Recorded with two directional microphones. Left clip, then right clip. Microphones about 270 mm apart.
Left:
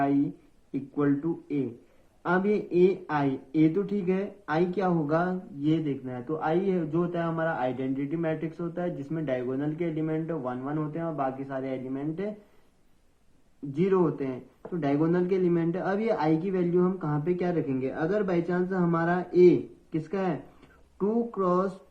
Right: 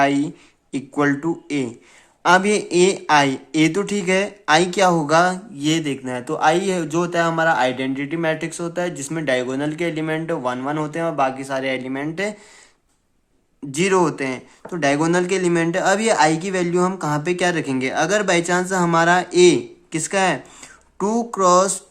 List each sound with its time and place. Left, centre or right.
0.9 s speech: right
13.7 s speech: right